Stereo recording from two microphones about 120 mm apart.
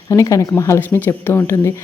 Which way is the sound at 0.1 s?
25° left (ahead or behind).